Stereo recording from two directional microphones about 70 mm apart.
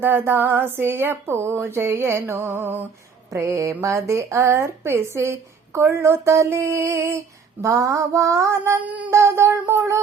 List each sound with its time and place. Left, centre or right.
0.0 s speech: right
3.3 s speech: right